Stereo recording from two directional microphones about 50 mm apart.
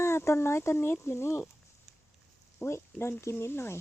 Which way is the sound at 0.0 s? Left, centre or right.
Left.